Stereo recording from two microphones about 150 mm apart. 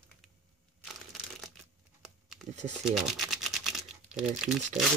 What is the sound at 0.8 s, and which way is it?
Crushing, centre (ahead or behind).